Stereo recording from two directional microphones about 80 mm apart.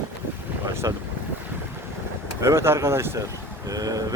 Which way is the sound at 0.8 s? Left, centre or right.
Right.